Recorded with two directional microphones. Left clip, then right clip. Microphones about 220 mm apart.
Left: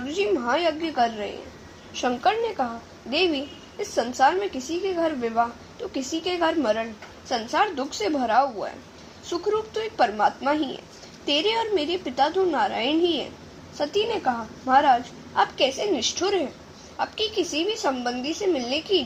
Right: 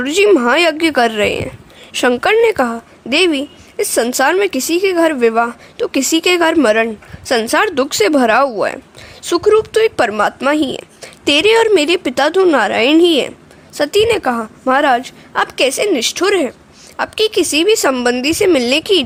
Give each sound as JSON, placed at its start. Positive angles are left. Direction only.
{"t": 0.0, "sound": "a woman's voice", "side_deg": -45}